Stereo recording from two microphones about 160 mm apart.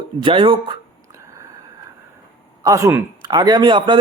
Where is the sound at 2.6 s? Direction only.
20° right (ahead or behind).